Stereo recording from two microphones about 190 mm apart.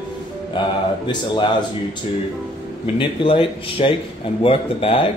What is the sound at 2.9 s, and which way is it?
A man's voice, 30° left (ahead or behind).